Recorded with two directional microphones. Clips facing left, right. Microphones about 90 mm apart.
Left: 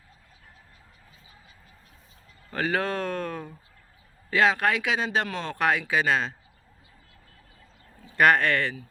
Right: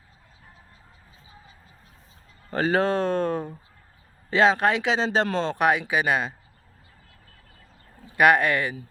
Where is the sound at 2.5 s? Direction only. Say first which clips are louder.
Right 5 dB; 30° right (ahead or behind).